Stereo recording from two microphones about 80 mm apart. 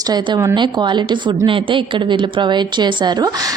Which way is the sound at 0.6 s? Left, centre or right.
Right.